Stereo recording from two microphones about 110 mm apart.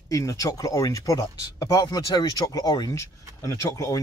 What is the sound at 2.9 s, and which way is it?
Speech, 25° left (ahead or behind).